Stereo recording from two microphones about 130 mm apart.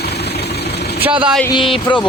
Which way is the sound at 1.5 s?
40° left (ahead or behind).